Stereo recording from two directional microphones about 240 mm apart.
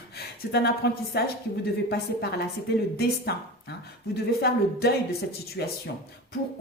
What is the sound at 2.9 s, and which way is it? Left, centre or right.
A woman's voice, left.